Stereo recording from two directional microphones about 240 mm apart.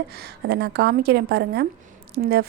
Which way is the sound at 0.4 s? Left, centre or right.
Right.